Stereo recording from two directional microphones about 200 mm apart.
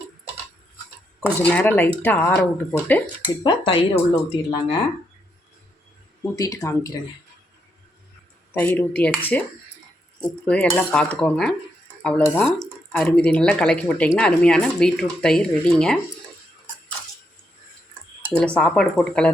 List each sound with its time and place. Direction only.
1.4 s speech: 10° left (ahead or behind)
3.4 s speech: 25° left (ahead or behind)
6.3 s speech: 15° left (ahead or behind)
8.5 s speech: 10° left (ahead or behind)
10.4 s speech: 5° left (ahead or behind)
18.3 s speech: 5° left (ahead or behind)